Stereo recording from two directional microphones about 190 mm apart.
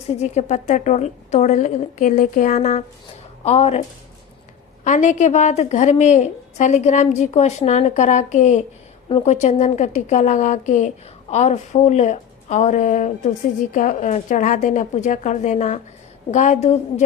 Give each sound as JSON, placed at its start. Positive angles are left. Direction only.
{"t": 0.1, "sound": "a woman's voice", "side_deg": 35}